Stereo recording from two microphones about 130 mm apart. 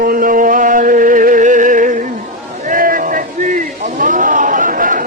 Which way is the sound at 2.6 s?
90° right.